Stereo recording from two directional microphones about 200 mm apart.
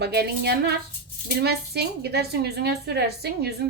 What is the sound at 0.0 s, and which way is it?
A woman's voice, 55° right (ahead or behind).